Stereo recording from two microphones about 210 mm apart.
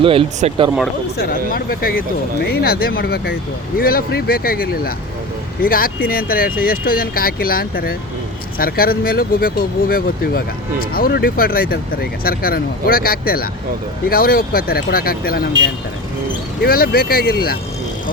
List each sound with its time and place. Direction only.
0.0 s speech: 25° right (ahead or behind)
1.2 s speech: 45° left (ahead or behind)
16.6 s speech: 45° left (ahead or behind)